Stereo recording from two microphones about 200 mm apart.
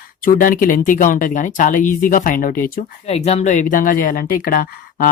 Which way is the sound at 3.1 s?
30° left (ahead or behind).